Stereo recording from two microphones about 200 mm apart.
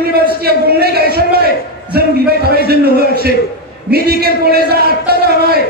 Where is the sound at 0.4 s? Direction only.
50° right (ahead or behind).